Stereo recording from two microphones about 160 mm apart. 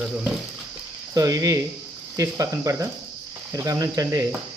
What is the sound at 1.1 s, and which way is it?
Speech, 20° right (ahead or behind).